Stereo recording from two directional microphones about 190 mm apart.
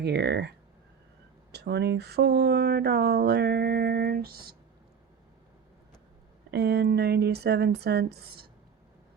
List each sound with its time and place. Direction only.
0.0 s speech: 60° right (ahead or behind)
1.5 s speech: 60° right (ahead or behind)
6.5 s speech: 60° right (ahead or behind)